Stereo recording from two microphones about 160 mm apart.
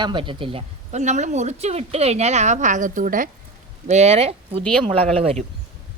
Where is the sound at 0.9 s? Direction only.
45° right (ahead or behind).